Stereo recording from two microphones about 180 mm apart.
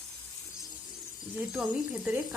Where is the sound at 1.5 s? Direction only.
5° right (ahead or behind).